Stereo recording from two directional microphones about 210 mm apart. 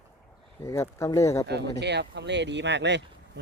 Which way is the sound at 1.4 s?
55° right (ahead or behind).